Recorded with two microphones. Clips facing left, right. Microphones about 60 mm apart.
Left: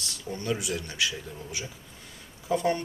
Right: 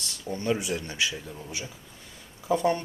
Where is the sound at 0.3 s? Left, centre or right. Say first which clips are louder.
Right 3 dB; right.